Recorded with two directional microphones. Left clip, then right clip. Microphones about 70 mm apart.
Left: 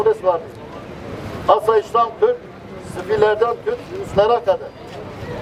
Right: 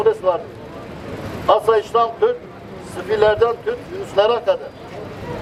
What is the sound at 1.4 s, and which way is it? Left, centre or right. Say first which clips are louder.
A man's voice: even; centre.